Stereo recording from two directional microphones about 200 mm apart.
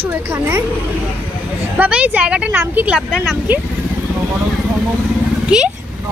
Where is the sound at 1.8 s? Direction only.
5° right (ahead or behind).